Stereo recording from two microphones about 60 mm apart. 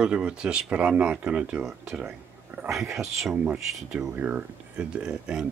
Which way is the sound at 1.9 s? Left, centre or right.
Centre.